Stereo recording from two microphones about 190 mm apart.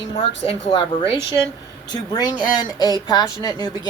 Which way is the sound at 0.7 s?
25° left (ahead or behind).